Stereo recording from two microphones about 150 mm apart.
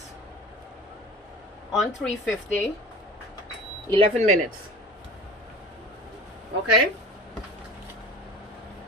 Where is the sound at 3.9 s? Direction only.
45° right (ahead or behind).